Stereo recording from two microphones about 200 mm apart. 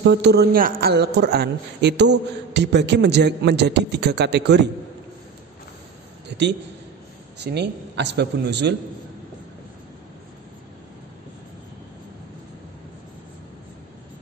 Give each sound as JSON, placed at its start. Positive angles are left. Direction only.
{"t": 0.0, "sound": "speech", "side_deg": -60}
{"t": 7.3, "sound": "speech", "side_deg": -55}